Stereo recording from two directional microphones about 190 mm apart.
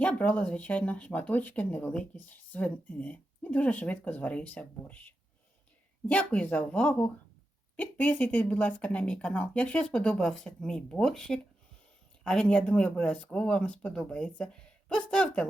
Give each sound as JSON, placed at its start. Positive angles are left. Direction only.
{"t": 0.0, "sound": "speech", "side_deg": 5}